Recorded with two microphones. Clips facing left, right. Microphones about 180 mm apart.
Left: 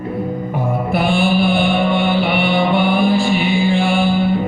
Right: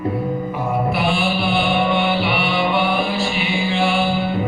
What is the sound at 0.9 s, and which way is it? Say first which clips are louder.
Mantra: left 4 dB; 50° left (ahead or behind).